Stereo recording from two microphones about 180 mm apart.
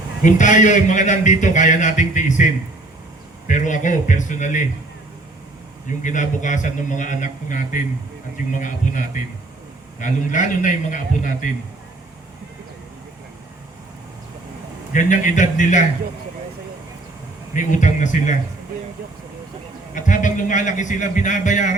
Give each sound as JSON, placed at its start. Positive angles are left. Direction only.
{"t": 0.2, "sound": "a man's voice", "side_deg": 45}
{"t": 6.0, "sound": "a man's voice", "side_deg": 45}
{"t": 14.9, "sound": "a man's voice", "side_deg": 45}
{"t": 17.5, "sound": "a man's voice", "side_deg": 45}
{"t": 19.9, "sound": "a man's voice", "side_deg": 45}